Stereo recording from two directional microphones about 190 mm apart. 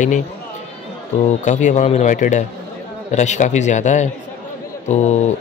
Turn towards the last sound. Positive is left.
turn(degrees=35)  # may be behind; listen again after turning